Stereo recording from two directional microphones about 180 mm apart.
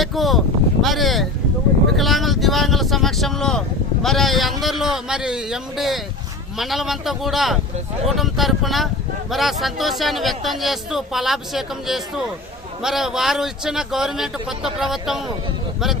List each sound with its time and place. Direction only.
0.0 s a sound: centre (ahead or behind)
2.0 s vehicle: centre (ahead or behind)
4.0 s speech: centre (ahead or behind)